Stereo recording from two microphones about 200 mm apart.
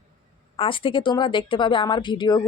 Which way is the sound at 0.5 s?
25° left (ahead or behind).